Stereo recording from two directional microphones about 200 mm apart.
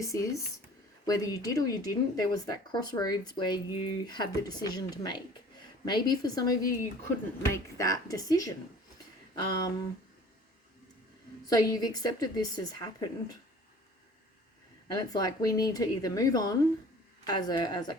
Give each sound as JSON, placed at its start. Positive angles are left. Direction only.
{"t": 0.0, "sound": "speech", "side_deg": 15}
{"t": 11.4, "sound": "speech", "side_deg": 20}
{"t": 14.9, "sound": "speech", "side_deg": 20}